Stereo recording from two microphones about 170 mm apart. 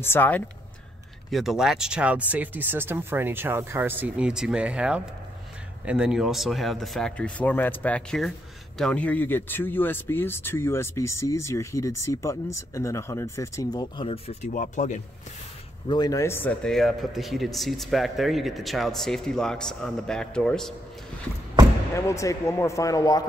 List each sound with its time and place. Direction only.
0.0 s speech: 10° left (ahead or behind)
1.3 s speech: centre (ahead or behind); by 14.5 s 35° left (ahead or behind)
14.5 s speech: 50° left (ahead or behind)
15.9 s speech: 25° left (ahead or behind); by 20.7 s 5° left (ahead or behind)
21.9 s speech: 15° left (ahead or behind)